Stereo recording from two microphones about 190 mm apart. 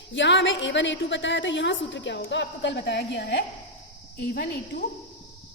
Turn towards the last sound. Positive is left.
turn(degrees=65)  # may be behind; listen again after turning